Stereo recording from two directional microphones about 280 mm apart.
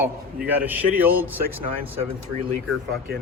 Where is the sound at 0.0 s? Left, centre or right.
Centre.